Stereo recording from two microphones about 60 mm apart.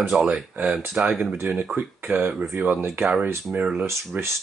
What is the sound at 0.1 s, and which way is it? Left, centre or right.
Speech, right.